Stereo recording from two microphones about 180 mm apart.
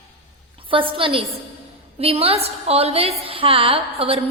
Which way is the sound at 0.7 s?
30° right (ahead or behind).